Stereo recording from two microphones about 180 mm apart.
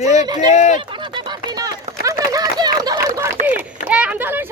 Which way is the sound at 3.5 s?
10° right (ahead or behind).